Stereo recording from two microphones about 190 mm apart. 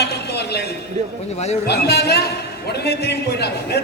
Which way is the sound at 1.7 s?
60° left (ahead or behind).